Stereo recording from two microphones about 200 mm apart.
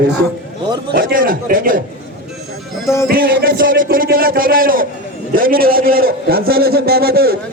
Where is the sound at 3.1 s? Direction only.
45° right (ahead or behind).